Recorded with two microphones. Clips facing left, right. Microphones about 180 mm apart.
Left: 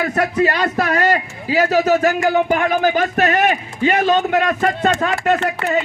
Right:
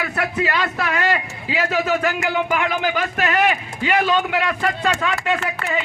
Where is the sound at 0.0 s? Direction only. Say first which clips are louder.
Left 6 dB; 40° left (ahead or behind).